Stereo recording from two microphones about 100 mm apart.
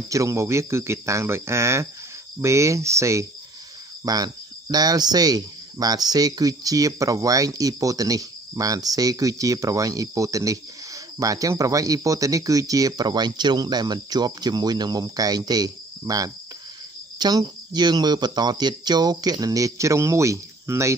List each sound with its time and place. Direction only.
0.1 s speech: 30° right (ahead or behind)
4.0 s speech: 40° right (ahead or behind)